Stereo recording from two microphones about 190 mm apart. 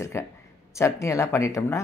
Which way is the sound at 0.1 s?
15° left (ahead or behind).